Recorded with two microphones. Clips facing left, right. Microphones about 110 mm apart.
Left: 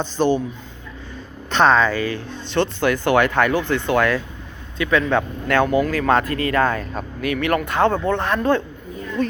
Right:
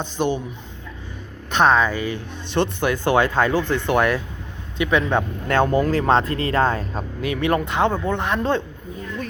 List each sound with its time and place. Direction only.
0.2 s speech: 10° right (ahead or behind)
1.5 s speech: 10° right (ahead or behind)